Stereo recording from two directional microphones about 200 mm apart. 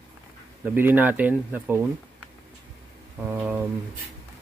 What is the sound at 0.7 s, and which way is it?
Speech, 10° right (ahead or behind).